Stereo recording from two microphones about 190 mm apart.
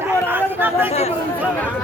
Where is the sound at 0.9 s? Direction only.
35° left (ahead or behind).